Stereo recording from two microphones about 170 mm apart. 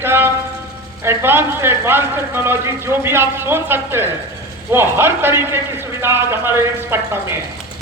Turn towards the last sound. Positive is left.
turn(degrees=-15)  # may be behind; listen again after turning